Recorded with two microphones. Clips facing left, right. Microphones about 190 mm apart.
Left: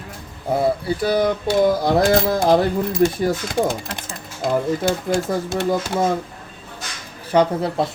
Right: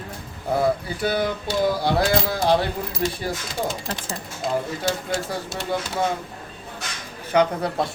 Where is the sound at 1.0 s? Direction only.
40° left (ahead or behind).